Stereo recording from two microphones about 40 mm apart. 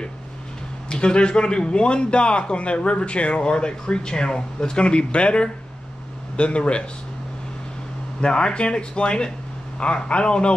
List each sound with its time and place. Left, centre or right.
0.8 s a man's voice: left
8.2 s a man's voice: left